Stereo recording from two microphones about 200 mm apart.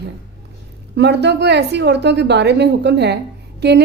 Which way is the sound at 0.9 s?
60° right (ahead or behind).